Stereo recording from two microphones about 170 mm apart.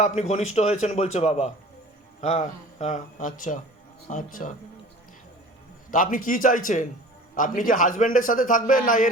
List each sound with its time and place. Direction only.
0.0 s a man's voice: 40° left (ahead or behind)
5.9 s a man's voice: 50° left (ahead or behind)